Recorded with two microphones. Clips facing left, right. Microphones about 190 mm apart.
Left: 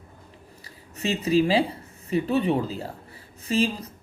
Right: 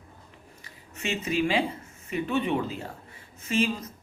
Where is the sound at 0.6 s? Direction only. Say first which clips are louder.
Left 5 dB; 35° left (ahead or behind).